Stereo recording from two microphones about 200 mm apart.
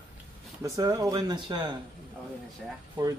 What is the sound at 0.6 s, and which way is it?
A man's voice, 15° right (ahead or behind).